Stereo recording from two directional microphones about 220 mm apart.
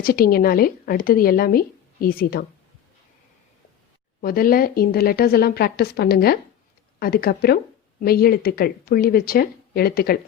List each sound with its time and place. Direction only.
0.0 s speech: 40° left (ahead or behind)
4.2 s speech: 40° left (ahead or behind)